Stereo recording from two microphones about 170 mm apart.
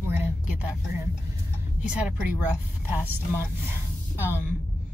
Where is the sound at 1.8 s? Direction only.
5° right (ahead or behind).